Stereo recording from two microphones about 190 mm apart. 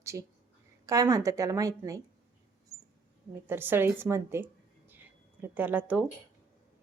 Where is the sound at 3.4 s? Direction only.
10° right (ahead or behind).